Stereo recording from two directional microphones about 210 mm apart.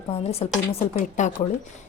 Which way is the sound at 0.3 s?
30° left (ahead or behind).